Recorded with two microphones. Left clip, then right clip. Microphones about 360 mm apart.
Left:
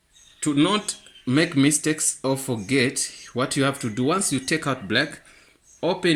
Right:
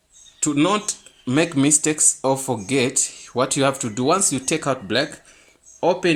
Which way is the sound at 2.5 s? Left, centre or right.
Right.